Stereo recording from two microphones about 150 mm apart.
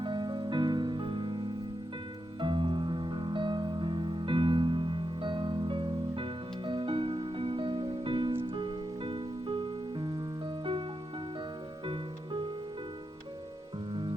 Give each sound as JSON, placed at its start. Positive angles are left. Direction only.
{"t": 0.0, "sound": "music", "side_deg": -30}
{"t": 11.9, "sound": "music", "side_deg": -35}
{"t": 13.9, "sound": "music", "side_deg": -35}